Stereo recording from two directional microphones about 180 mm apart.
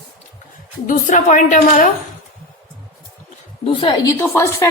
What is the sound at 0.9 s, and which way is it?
A woman's voice, 45° left (ahead or behind).